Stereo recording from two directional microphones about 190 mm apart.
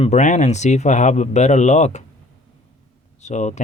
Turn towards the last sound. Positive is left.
turn(degrees=40)  # may be behind; listen again after turning